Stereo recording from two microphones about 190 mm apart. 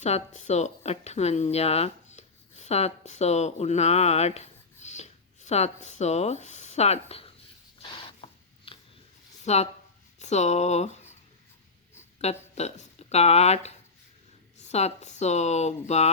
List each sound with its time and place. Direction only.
0.0 s speech: 35° left (ahead or behind)
7.8 s a sound: 30° left (ahead or behind)
9.4 s speech: 35° left (ahead or behind)
12.2 s speech: 35° left (ahead or behind)